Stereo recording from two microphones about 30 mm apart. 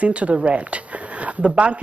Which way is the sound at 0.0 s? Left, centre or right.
Right.